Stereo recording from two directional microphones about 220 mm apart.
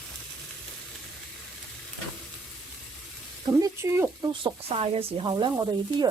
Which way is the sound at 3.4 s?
15° right (ahead or behind).